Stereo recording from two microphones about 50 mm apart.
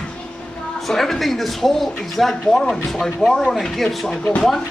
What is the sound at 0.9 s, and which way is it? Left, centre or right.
Speech, centre.